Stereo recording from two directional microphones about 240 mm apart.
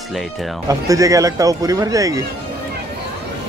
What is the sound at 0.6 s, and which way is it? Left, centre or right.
Speech, centre.